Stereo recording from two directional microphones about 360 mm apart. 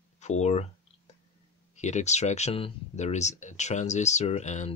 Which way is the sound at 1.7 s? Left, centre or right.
Centre.